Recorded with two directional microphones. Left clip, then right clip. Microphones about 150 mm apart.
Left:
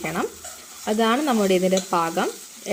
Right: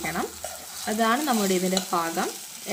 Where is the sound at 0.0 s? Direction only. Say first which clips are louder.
Left 3 dB; 25° left (ahead or behind).